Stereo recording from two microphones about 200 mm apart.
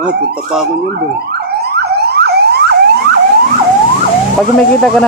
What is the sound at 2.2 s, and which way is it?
Siren, 55° right (ahead or behind).